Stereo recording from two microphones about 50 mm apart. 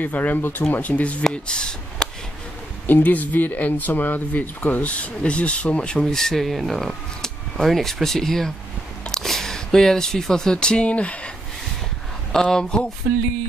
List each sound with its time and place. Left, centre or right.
0.0 s speech: left
1.3 s speech: centre
2.9 s speech: left
4.9 s speech: left
6.0 s speech: centre; by 11.1 s left
12.3 s speech: centre